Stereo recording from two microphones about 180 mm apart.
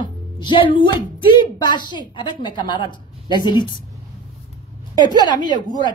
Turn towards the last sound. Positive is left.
turn(degrees=25)  # may be behind; listen again after turning